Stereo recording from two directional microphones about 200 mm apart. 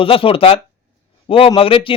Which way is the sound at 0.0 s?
25° left (ahead or behind).